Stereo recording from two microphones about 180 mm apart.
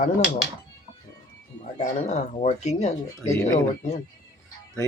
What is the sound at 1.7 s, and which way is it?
Speech, 40° left (ahead or behind).